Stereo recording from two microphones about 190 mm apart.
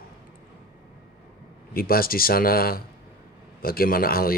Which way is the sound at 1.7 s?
50° left (ahead or behind).